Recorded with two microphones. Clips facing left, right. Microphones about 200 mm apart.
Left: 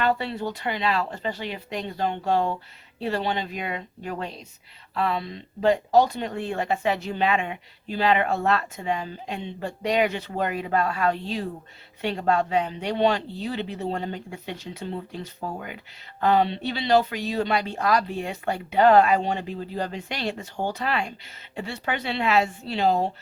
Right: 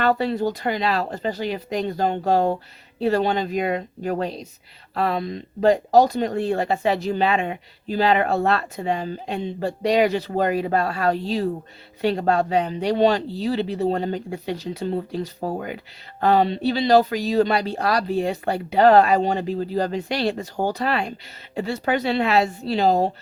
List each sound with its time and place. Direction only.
0.0 s speech: 40° right (ahead or behind)